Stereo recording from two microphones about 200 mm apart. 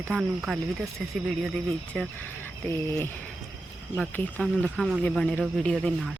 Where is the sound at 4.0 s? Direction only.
5° left (ahead or behind).